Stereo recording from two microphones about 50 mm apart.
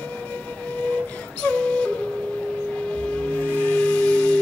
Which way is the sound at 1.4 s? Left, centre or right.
Left.